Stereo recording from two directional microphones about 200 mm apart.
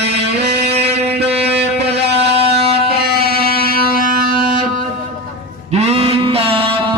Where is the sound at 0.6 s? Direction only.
30° right (ahead or behind).